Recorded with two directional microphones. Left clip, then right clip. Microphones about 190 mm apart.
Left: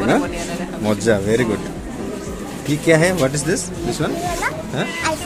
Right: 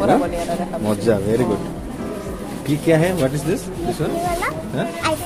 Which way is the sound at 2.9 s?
5° left (ahead or behind).